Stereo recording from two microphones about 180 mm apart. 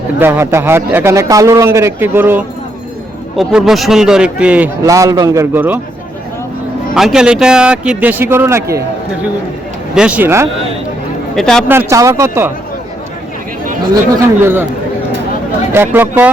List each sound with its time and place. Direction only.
0.2 s a man's voice: 10° right (ahead or behind)
4.8 s a man's voice: 20° right (ahead or behind)
6.9 s a man's voice: 5° right (ahead or behind)
9.9 s a man's voice: 5° right (ahead or behind)
11.3 s a man's voice: 5° left (ahead or behind)
11.7 s a man's voice: 15° right (ahead or behind)
14.4 s a man's voice: 10° right (ahead or behind)
15.7 s a man's voice: 10° right (ahead or behind)